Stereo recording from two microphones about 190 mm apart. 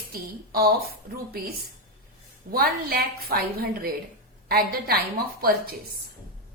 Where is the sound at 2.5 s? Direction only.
55° right (ahead or behind).